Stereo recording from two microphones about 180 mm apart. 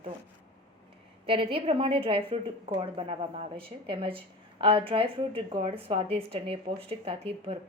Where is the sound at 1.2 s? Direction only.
30° right (ahead or behind).